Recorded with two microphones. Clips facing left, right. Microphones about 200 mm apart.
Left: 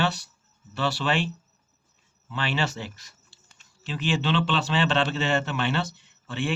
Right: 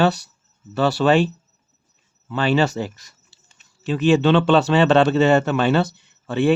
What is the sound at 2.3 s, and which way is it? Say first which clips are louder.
Speech: right 10 dB; 40° right (ahead or behind).